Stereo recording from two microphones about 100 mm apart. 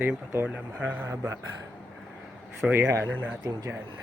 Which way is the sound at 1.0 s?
30° right (ahead or behind).